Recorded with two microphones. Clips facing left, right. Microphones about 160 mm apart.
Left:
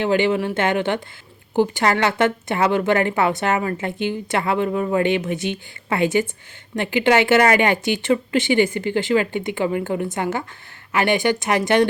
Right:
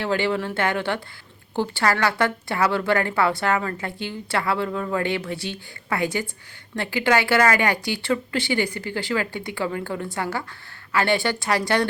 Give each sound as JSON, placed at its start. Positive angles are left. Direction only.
{"t": 0.0, "sound": "a woman's voice", "side_deg": 20}